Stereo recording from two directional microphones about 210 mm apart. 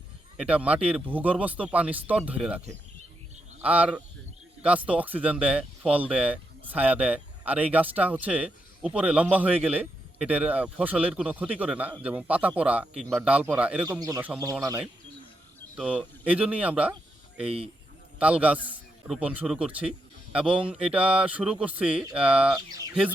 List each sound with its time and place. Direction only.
0.3 s speech: 5° right (ahead or behind)
3.6 s speech: 5° right (ahead or behind)
15.7 s speech: 5° right (ahead or behind)
18.2 s a man's voice: 5° right (ahead or behind)